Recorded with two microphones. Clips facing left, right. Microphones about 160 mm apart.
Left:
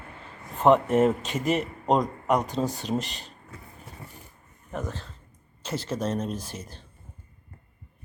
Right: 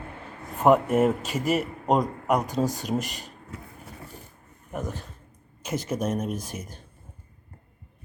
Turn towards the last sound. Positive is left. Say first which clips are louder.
# right 2 dB
turn(degrees=-15)  # may be behind; listen again after turning